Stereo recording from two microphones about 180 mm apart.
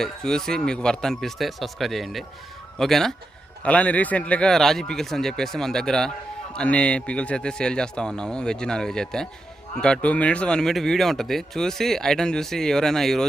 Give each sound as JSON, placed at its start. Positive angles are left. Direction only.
{"t": 0.0, "sound": "speech", "side_deg": 5}